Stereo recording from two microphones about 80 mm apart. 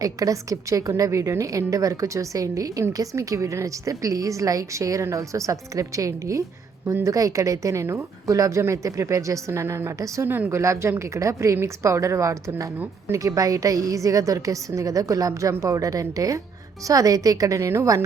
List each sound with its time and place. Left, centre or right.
0.0 s a woman's voice: right
10.2 s a woman's voice: right